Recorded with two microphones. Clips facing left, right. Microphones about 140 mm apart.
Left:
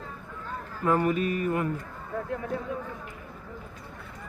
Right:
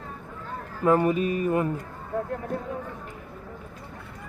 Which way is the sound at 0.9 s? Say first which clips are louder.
Right 3 dB; 25° right (ahead or behind).